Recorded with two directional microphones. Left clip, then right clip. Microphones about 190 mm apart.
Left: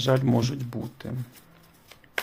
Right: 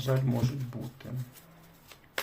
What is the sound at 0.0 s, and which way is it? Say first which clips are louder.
Speech: left 8 dB; 55° left (ahead or behind).